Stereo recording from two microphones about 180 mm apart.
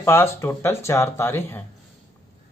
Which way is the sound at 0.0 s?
15° left (ahead or behind).